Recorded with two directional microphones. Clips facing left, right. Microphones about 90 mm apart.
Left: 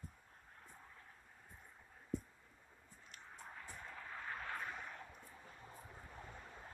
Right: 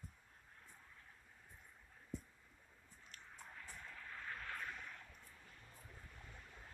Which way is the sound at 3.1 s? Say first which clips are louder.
Left 3 dB; 20° left (ahead or behind).